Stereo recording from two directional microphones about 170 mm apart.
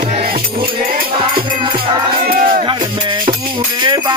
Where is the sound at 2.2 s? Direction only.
55° right (ahead or behind).